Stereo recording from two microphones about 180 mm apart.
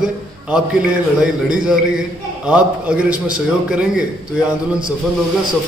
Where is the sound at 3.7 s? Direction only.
5° right (ahead or behind).